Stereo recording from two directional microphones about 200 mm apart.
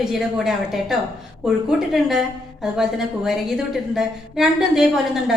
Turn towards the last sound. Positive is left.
turn(degrees=0)  # may be behind; listen again after turning